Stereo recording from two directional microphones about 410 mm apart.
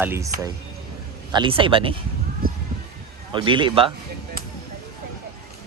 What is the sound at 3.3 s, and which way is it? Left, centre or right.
Speech, centre.